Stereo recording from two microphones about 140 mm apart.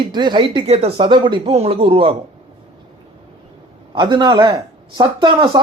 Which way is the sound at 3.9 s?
35° right (ahead or behind).